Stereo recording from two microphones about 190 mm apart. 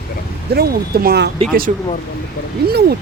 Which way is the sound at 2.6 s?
55° right (ahead or behind).